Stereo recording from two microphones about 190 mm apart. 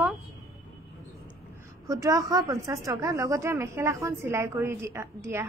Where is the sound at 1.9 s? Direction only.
15° right (ahead or behind).